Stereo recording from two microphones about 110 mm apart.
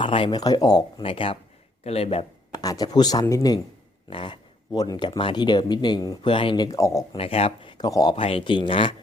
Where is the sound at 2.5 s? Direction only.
35° left (ahead or behind).